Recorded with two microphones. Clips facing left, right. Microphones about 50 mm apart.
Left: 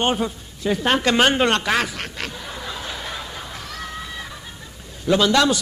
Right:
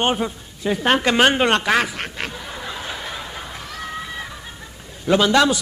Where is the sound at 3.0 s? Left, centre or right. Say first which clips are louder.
Right 1 dB; centre.